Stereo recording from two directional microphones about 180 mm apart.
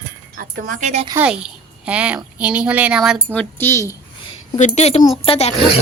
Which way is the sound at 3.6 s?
15° left (ahead or behind).